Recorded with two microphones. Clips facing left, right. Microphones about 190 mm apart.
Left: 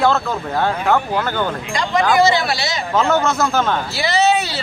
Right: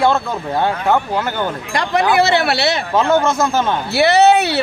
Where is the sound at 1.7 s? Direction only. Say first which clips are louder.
Right 2 dB; 65° right (ahead or behind).